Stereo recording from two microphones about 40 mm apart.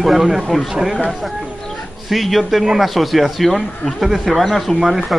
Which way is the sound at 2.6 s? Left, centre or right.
Centre.